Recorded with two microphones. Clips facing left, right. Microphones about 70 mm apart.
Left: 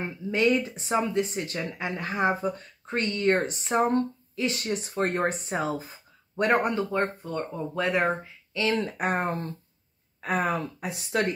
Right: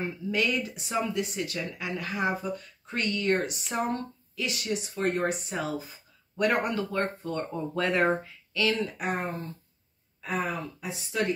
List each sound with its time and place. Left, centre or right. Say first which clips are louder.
0.0 s speech: left 4 dB; left
7.2 s speech: even; centre; by 8.7 s left
8.7 s speech: left 4 dB; left